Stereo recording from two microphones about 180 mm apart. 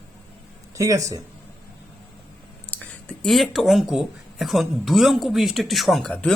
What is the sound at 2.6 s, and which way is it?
Speech, 5° left (ahead or behind).